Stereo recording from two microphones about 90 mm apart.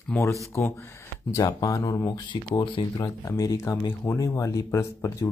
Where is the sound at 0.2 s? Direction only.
30° left (ahead or behind).